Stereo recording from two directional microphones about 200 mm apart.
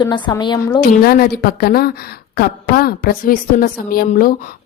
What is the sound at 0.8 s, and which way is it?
A woman's voice, 45° left (ahead or behind).